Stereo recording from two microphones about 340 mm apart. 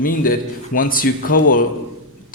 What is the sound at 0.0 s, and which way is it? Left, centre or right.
A man's voice, left.